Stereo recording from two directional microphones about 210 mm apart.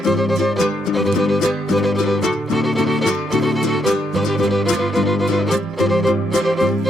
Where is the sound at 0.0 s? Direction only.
Centre (ahead or behind).